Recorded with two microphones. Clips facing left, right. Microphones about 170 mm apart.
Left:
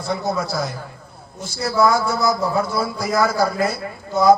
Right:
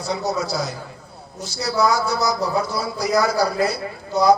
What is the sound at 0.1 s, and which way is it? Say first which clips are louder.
Speech: left 1 dB; 50° left (ahead or behind).